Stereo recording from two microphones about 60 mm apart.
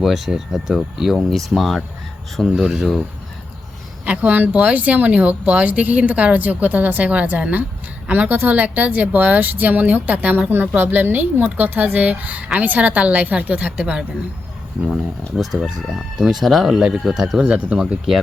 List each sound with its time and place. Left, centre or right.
0.0 s crowing: centre
2.6 s speech: centre
4.0 s a woman's voice: right
15.4 s crowing: centre
17.4 s speech: centre